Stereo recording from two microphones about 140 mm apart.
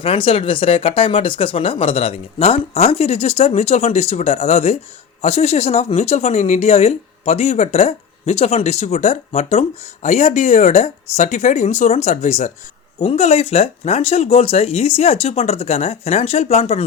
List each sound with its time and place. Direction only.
0.0 s speech: 40° left (ahead or behind); by 12.5 s 60° left (ahead or behind)
13.0 s speech: 45° left (ahead or behind)